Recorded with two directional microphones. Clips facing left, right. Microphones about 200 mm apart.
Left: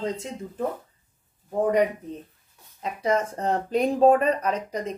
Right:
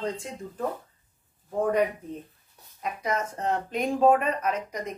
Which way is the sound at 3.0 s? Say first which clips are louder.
Left 5 dB; 30° left (ahead or behind).